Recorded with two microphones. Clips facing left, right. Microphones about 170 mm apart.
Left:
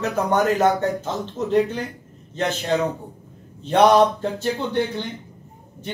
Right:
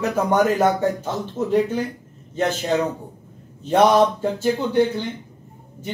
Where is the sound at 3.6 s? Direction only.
10° right (ahead or behind).